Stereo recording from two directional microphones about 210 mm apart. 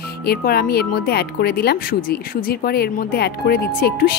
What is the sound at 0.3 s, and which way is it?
Speech, 50° left (ahead or behind).